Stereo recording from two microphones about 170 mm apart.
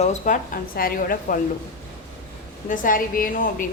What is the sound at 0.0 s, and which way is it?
Speech, 45° left (ahead or behind).